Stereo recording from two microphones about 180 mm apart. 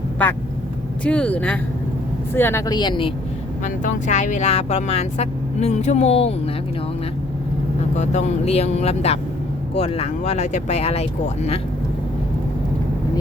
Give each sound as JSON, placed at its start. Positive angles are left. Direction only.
{"t": 0.2, "sound": "speech", "side_deg": 10}
{"t": 3.6, "sound": "speech", "side_deg": 40}
{"t": 7.9, "sound": "speech", "side_deg": 40}